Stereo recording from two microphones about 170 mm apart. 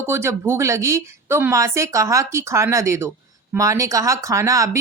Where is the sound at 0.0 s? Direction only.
15° right (ahead or behind).